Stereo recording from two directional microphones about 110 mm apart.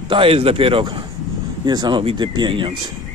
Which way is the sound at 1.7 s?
40° right (ahead or behind).